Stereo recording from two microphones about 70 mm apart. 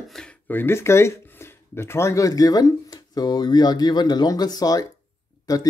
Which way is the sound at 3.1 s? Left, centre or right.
Left.